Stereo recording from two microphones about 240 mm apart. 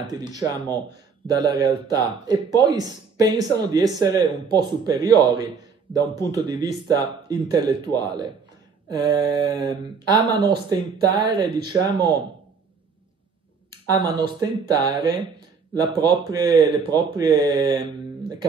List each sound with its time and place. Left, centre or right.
0.1 s speech: centre
13.8 s speech: centre